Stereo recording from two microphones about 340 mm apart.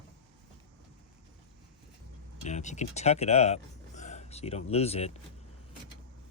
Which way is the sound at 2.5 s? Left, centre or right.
Left.